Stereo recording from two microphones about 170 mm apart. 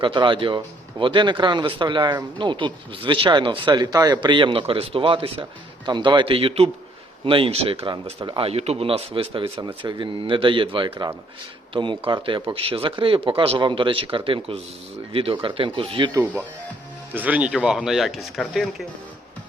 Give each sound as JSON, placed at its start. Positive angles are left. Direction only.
{"t": 0.0, "sound": "speech", "side_deg": -30}
{"t": 16.2, "sound": "speech", "side_deg": -10}